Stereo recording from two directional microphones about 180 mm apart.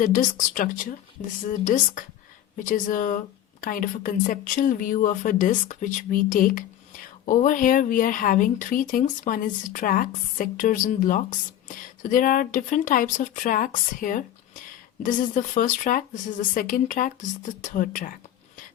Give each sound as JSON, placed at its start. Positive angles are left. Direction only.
{"t": 0.0, "sound": "speech", "side_deg": 45}